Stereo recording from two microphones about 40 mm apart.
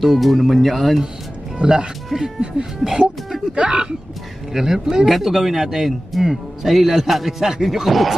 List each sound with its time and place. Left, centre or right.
0.0 s speech: centre
1.6 s speech: centre
2.8 s a sound: centre
3.5 s speech: right
4.6 s speech: centre